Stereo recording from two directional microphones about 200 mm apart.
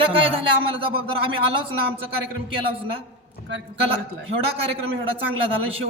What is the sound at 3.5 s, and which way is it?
Speech, 60° right (ahead or behind).